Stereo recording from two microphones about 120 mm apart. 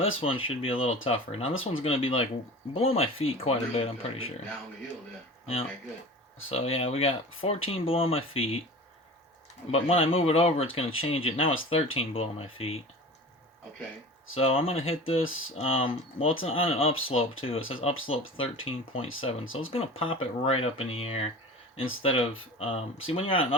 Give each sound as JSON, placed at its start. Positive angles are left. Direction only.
{"t": 0.2, "sound": "speech", "side_deg": 50}
{"t": 6.5, "sound": "speech", "side_deg": 55}
{"t": 9.7, "sound": "speech", "side_deg": 50}
{"t": 14.3, "sound": "speech", "side_deg": 55}